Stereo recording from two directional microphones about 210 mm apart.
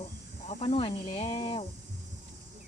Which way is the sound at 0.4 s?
25° left (ahead or behind).